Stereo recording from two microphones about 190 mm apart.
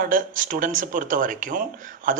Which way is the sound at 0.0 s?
45° right (ahead or behind).